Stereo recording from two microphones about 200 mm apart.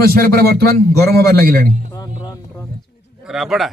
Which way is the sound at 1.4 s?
45° right (ahead or behind).